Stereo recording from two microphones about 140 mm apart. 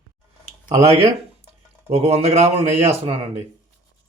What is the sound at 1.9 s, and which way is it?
Speech, 45° right (ahead or behind).